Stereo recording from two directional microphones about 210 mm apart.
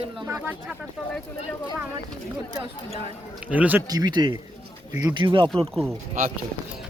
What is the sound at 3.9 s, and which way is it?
Speech, 20° right (ahead or behind).